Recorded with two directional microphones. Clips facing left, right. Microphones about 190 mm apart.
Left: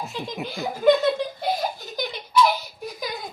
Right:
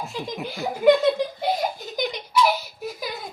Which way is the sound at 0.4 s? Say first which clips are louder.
Right 1 dB; 10° right (ahead or behind).